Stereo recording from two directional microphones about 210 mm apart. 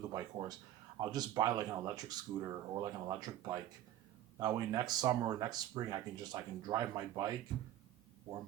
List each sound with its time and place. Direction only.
0.1 s speech: 20° right (ahead or behind)